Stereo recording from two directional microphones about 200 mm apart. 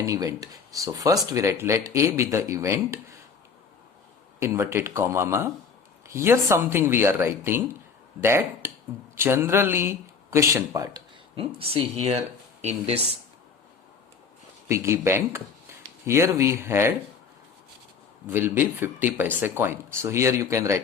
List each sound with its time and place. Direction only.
0.0 s speech: 15° right (ahead or behind)
4.4 s speech: 10° right (ahead or behind)
11.3 s speech: 30° right (ahead or behind)
14.7 s speech: 15° right (ahead or behind)
18.3 s speech: 10° right (ahead or behind)